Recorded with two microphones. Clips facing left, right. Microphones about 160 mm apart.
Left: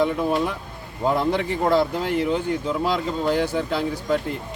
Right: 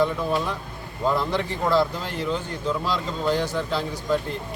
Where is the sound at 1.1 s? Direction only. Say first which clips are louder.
Left 6 dB; 55° left (ahead or behind).